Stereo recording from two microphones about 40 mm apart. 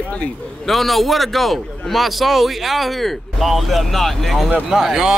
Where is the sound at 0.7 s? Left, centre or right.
Centre.